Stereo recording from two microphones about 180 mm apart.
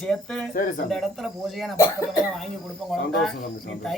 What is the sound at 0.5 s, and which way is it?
Speech, 50° left (ahead or behind).